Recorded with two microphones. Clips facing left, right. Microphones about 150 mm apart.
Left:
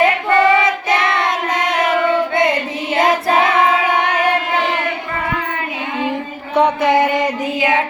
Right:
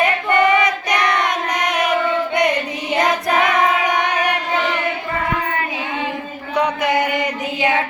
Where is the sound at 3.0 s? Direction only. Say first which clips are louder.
Left 3 dB; 25° left (ahead or behind).